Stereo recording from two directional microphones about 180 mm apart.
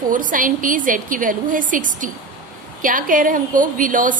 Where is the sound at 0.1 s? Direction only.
45° right (ahead or behind).